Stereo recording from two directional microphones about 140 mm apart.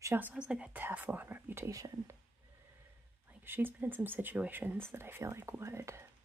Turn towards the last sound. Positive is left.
turn(degrees=-20)  # may be behind; listen again after turning